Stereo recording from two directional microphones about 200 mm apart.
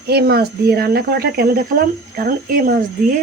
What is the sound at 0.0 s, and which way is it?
Speech, 55° right (ahead or behind).